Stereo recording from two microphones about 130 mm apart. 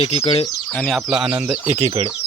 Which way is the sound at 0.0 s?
50° left (ahead or behind).